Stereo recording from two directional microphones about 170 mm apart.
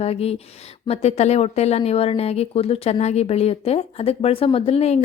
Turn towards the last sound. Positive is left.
turn(degrees=35)  # may be behind; listen again after turning